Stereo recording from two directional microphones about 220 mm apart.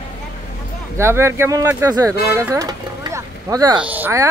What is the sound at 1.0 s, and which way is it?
Speech, 10° right (ahead or behind).